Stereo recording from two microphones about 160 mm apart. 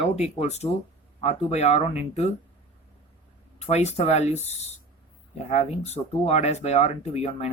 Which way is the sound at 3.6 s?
40° left (ahead or behind).